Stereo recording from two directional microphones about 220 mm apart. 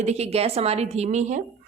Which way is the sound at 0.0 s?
30° right (ahead or behind).